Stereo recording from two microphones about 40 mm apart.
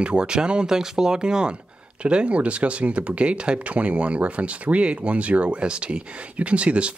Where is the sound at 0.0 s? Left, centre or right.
Right.